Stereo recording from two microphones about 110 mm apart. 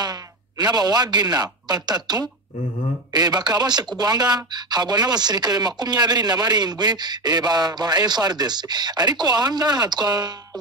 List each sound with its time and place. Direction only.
0.0 s speech: 35° right (ahead or behind)